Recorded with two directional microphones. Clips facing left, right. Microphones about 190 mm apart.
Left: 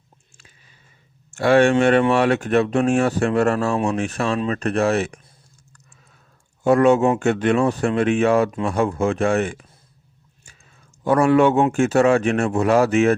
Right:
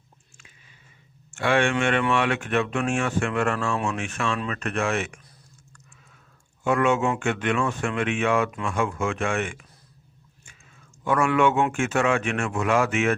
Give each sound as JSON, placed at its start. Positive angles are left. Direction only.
{"t": 1.3, "sound": "speech", "side_deg": 40}
{"t": 6.6, "sound": "speech", "side_deg": 35}
{"t": 11.0, "sound": "speech", "side_deg": 35}